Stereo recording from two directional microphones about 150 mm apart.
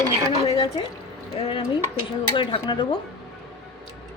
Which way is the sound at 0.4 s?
35° left (ahead or behind).